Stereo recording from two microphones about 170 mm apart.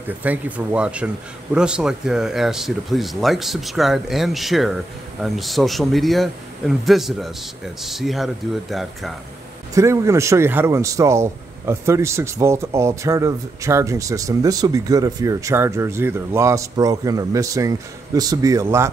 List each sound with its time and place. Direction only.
0.2 s speech: 10° right (ahead or behind)
9.8 s a man's voice: 15° right (ahead or behind)